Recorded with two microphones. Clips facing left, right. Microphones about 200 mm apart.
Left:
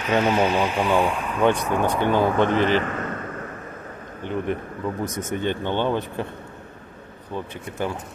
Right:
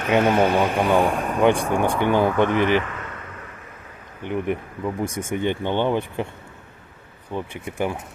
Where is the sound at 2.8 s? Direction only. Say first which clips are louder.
Left 6 dB; 45° left (ahead or behind).